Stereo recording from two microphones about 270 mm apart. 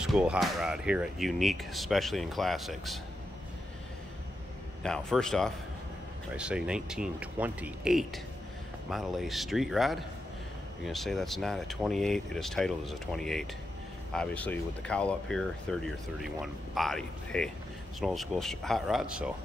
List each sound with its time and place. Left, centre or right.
0.0 s speech: centre
4.8 s speech: centre